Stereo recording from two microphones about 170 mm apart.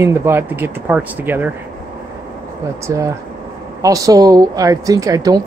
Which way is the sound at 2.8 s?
15° right (ahead or behind).